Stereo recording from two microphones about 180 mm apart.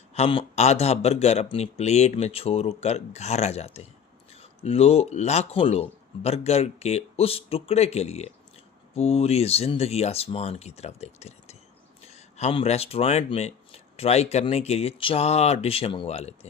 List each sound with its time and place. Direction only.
0.1 s speech: 35° left (ahead or behind)